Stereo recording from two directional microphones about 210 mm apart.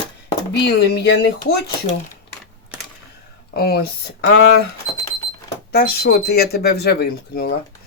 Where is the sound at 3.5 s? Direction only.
50° left (ahead or behind).